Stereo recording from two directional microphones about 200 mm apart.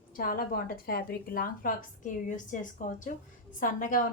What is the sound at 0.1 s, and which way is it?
A woman's voice, 45° left (ahead or behind).